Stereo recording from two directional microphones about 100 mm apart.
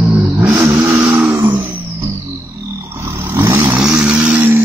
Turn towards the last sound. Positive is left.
turn(degrees=-15)  # may be behind; listen again after turning